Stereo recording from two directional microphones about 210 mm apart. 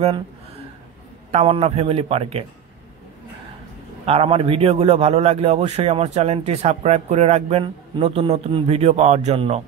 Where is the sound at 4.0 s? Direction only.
25° right (ahead or behind).